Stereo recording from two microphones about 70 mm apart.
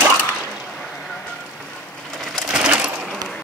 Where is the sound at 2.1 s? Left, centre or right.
Centre.